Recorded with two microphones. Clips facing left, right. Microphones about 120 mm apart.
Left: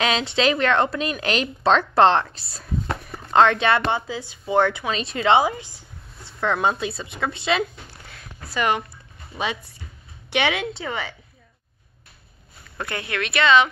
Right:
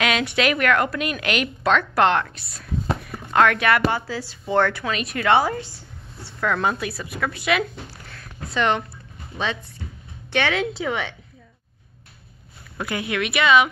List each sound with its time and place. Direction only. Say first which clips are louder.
0.0 s a woman's voice: even; 30° left (ahead or behind)
8.5 s a woman's voice: right 1 dB; 5° left (ahead or behind)
10.7 s a woman's voice: right 3 dB; centre (ahead or behind)
12.7 s speech: right 3 dB; 10° right (ahead or behind)